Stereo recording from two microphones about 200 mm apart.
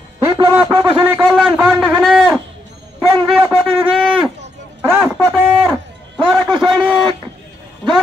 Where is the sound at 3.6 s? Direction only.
25° right (ahead or behind).